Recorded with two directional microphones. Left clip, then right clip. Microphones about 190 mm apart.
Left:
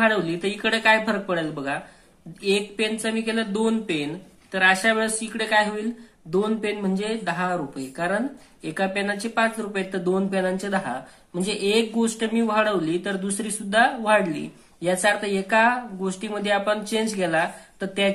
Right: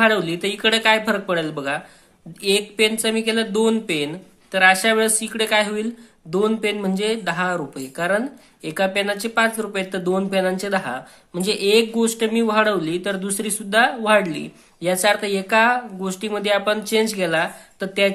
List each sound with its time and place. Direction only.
0.0 s speech: 25° right (ahead or behind)